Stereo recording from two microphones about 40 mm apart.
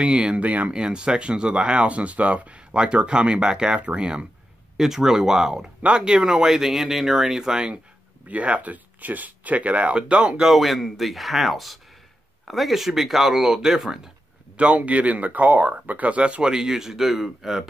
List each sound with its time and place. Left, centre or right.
0.0 s speech: right
0.4 s speech: right
0.7 s speech: right
4.7 s speech: centre
5.8 s speech: right
8.3 s speech: right
10.4 s speech: centre
14.6 s speech: right
16.4 s speech: centre